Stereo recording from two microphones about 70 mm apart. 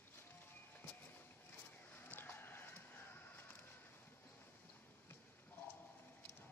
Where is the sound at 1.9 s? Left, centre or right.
Left.